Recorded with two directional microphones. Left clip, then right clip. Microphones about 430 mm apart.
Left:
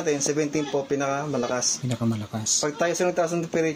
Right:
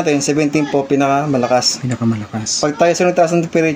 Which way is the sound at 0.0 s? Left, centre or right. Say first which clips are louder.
Right 9 dB; left.